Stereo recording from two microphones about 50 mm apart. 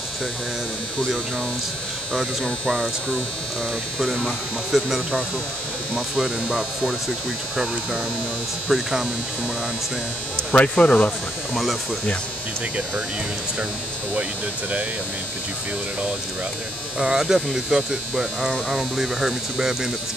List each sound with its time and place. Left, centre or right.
2.4 s hum: centre
4.7 s speech: centre
10.3 s speech: left
17.0 s speech: centre